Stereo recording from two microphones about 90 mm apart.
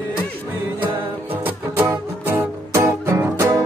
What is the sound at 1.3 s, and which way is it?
Music, 20° right (ahead or behind).